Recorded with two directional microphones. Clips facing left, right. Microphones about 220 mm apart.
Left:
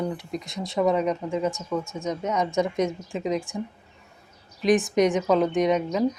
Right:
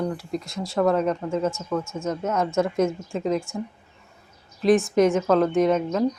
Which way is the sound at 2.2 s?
5° right (ahead or behind).